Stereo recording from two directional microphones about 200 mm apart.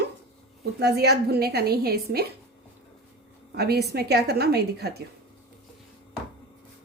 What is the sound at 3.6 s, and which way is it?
A woman's voice, 55° right (ahead or behind).